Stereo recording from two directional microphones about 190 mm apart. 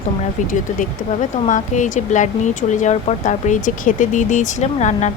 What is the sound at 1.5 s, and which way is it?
Speech, 40° left (ahead or behind).